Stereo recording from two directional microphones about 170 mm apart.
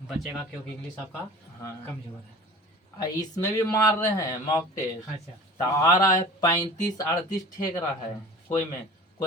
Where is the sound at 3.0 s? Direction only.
20° left (ahead or behind).